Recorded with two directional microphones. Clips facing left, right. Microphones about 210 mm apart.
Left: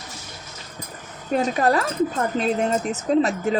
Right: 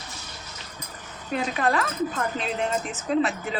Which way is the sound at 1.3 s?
45° left (ahead or behind).